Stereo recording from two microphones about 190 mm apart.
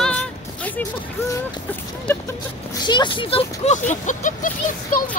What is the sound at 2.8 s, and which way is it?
Speech, 25° left (ahead or behind).